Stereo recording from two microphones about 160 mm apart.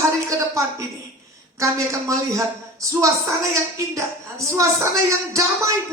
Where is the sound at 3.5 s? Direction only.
20° right (ahead or behind).